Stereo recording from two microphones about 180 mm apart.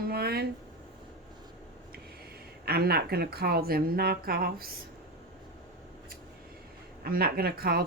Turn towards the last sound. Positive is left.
turn(degrees=-60)  # may be behind; listen again after turning